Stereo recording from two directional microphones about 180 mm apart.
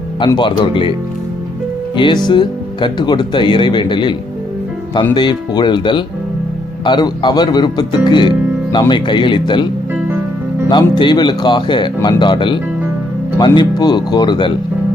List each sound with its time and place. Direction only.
0.3 s speech: 25° left (ahead or behind)
2.0 s speech: 25° left (ahead or behind)
5.1 s speech: 25° left (ahead or behind)
10.7 s speech: 25° left (ahead or behind)